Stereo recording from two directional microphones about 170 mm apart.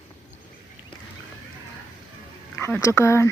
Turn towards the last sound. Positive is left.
turn(degrees=15)  # may be behind; listen again after turning